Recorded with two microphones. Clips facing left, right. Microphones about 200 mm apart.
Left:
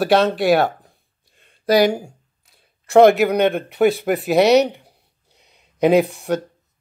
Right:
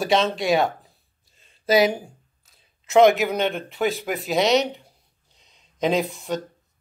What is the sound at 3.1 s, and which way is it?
Speech, centre (ahead or behind).